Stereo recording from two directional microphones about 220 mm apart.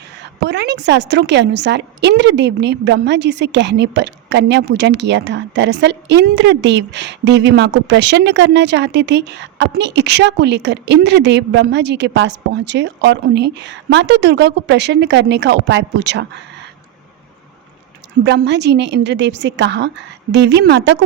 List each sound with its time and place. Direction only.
0.4 s a woman's voice: 50° right (ahead or behind)
18.2 s a woman's voice: 50° right (ahead or behind)